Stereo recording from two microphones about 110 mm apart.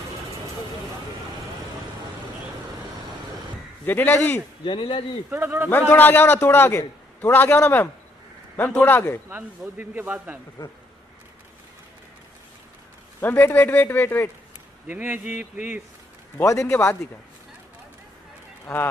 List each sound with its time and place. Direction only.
3.8 s a man's voice: 15° left (ahead or behind)
4.6 s speech: 45° left (ahead or behind)
5.3 s a man's voice: 20° right (ahead or behind)
5.7 s a man's voice: 20° left (ahead or behind)
9.3 s a man's voice: 15° right (ahead or behind)
13.2 s a man's voice: 20° left (ahead or behind)
14.9 s a man's voice: 15° right (ahead or behind)
16.4 s a man's voice: 25° left (ahead or behind)